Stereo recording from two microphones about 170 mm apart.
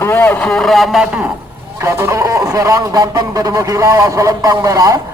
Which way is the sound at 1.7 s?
15° right (ahead or behind).